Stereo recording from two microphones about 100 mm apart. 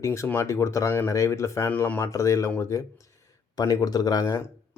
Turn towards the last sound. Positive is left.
turn(degrees=35)  # may be behind; listen again after turning